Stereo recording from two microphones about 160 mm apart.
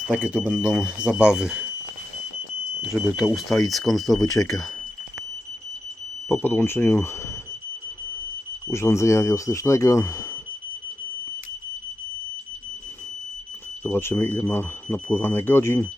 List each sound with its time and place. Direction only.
0.1 s speech: 10° right (ahead or behind)
3.2 s speech: centre (ahead or behind)
4.1 s speech: 20° left (ahead or behind)
6.2 s speech: 15° left (ahead or behind)
8.7 s speech: 15° left (ahead or behind)
13.8 s speech: 15° left (ahead or behind)